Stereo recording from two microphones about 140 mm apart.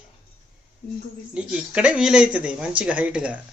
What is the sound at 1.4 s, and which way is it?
Speech, 5° right (ahead or behind).